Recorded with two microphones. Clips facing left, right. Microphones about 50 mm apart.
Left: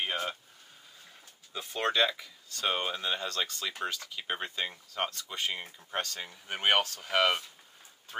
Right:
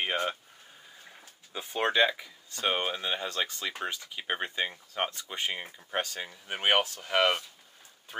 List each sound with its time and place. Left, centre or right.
0.0 s speech: right
1.5 s speech: centre